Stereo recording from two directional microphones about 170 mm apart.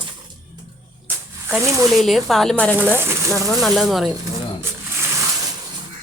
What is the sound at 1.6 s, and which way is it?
Speech, 15° right (ahead or behind).